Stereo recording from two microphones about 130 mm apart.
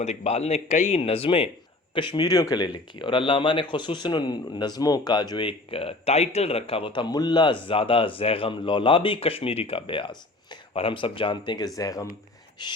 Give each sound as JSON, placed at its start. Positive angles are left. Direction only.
{"t": 0.0, "sound": "a man's voice", "side_deg": 55}